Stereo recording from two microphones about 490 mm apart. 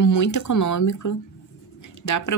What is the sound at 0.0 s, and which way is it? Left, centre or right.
Speech, left.